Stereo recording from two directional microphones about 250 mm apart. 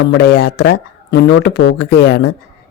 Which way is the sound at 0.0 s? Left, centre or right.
Left.